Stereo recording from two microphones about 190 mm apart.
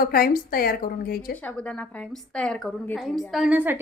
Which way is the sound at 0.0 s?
50° left (ahead or behind).